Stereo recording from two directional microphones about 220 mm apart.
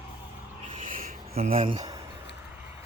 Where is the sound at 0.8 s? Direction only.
35° right (ahead or behind).